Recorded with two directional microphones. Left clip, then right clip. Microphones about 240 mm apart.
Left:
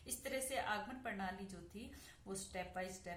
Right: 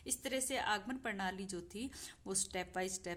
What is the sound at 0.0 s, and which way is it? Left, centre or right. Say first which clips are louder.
A woman's voice: right 4 dB; right.